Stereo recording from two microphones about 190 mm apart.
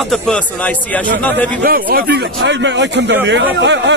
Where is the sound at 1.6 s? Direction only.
50° right (ahead or behind).